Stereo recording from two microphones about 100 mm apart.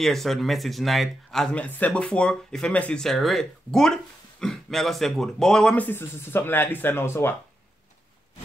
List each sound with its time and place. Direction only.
0.0 s speech: 5° left (ahead or behind)
5.9 s speech: 20° left (ahead or behind)